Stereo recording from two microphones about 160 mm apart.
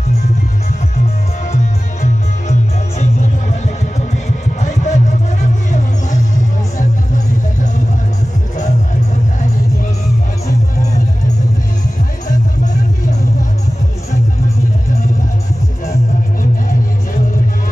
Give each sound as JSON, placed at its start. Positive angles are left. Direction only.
{"t": 1.5, "sound": "music", "side_deg": 45}